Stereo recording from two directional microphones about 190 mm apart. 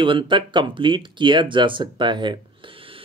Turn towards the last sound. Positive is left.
turn(degrees=-30)  # may be behind; listen again after turning